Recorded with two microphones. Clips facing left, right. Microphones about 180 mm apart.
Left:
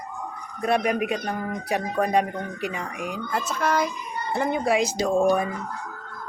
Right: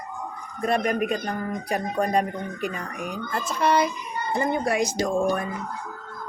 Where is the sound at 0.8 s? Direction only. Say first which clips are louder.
Even; 5° left (ahead or behind).